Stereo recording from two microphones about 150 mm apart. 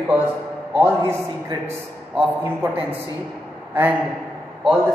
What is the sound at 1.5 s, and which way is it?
Speech, 25° right (ahead or behind).